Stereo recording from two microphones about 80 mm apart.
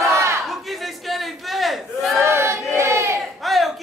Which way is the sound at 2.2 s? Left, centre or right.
Right.